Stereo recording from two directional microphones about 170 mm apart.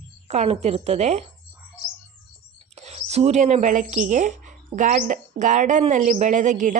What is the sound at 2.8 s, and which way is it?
Speech, 40° right (ahead or behind).